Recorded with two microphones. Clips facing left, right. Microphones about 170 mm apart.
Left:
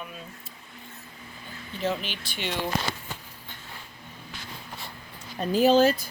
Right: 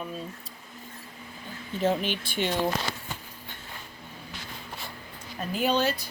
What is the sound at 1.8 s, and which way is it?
Speech, 50° right (ahead or behind).